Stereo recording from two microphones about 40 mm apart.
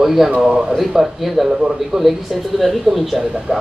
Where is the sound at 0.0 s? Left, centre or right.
Centre.